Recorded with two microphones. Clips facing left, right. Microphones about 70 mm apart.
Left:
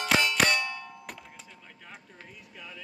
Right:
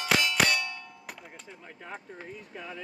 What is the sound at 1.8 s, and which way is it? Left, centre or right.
Speech, right.